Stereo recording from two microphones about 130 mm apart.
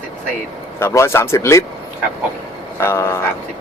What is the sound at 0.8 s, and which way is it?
Speech, 20° left (ahead or behind).